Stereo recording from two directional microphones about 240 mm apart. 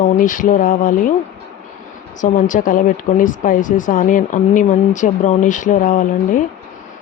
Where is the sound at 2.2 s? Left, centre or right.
Left.